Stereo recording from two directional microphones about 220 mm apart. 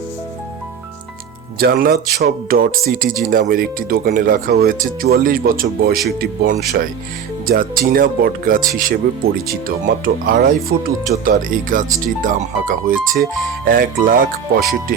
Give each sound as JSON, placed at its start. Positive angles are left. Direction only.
{"t": 1.5, "sound": "speech", "side_deg": -45}